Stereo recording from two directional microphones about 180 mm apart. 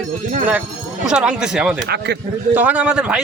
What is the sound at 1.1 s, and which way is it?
Speech, 5° right (ahead or behind).